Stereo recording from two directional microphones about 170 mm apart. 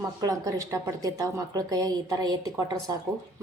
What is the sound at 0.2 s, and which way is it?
A woman's voice, 20° right (ahead or behind).